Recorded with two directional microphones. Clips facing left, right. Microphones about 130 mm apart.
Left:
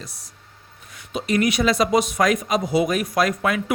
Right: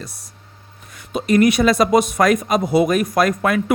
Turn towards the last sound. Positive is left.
turn(degrees=-50)  # may be behind; listen again after turning